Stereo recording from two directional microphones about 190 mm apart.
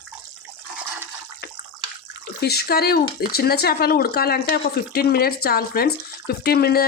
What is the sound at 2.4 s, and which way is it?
Speech, 55° left (ahead or behind).